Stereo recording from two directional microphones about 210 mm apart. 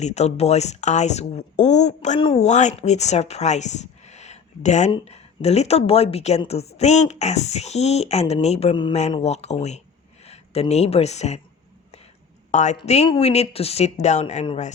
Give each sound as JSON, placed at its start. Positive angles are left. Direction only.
{"t": 0.0, "sound": "a woman's voice", "side_deg": 30}
{"t": 12.5, "sound": "a woman's voice", "side_deg": 35}